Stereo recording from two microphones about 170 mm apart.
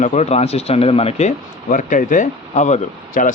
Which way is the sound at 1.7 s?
50° left (ahead or behind).